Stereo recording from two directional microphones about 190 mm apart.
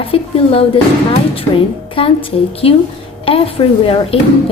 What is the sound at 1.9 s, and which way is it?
A woman's voice, 30° left (ahead or behind).